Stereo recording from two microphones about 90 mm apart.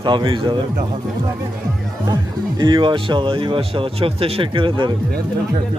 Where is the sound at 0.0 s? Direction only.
60° right (ahead or behind).